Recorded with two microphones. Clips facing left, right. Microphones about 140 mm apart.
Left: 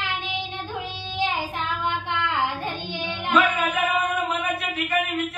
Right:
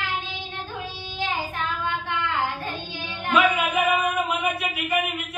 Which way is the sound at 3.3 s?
15° right (ahead or behind).